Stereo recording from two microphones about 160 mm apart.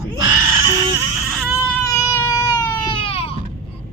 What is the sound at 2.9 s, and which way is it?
Baby cry, 35° left (ahead or behind).